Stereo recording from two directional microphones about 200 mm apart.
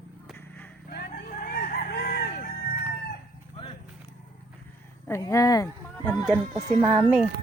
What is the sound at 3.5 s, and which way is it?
Horse, 25° left (ahead or behind).